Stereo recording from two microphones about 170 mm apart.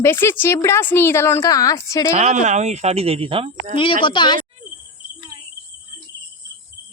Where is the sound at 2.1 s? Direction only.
40° right (ahead or behind).